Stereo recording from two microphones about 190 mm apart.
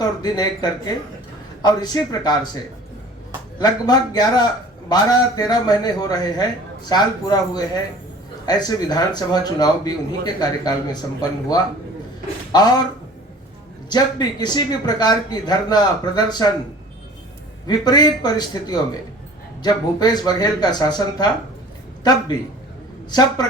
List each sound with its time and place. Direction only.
0.0 s a man's voice: 20° left (ahead or behind)
3.6 s a man's voice: 20° left (ahead or behind)
13.9 s a man's voice: 20° left (ahead or behind)
17.7 s a man's voice: 20° left (ahead or behind)